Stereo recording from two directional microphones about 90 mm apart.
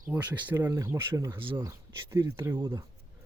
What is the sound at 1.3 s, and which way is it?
Speech, 70° right (ahead or behind).